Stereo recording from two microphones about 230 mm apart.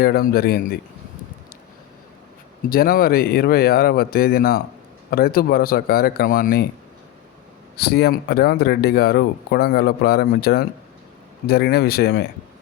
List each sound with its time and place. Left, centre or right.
0.0 s speech: left
2.6 s speech: left
7.8 s speech: left